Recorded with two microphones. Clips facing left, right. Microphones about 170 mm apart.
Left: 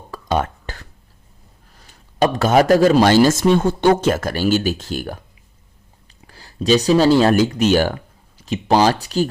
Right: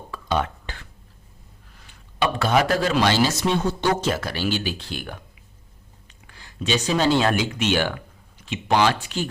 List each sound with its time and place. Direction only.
0.1 s burping: 45° left (ahead or behind)
1.7 s speech: 40° left (ahead or behind)
6.2 s speech: 35° left (ahead or behind)